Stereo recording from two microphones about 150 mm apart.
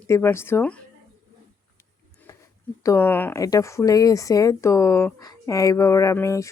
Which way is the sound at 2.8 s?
15° left (ahead or behind).